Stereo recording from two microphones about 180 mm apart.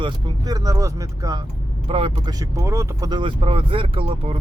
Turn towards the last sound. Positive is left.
turn(degrees=-30)  # may be behind; listen again after turning